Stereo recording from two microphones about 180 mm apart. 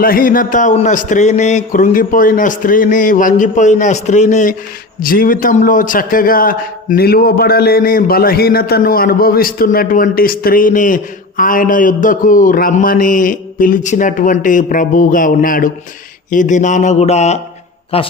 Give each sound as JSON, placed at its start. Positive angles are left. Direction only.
{"t": 0.0, "sound": "a man's voice", "side_deg": 50}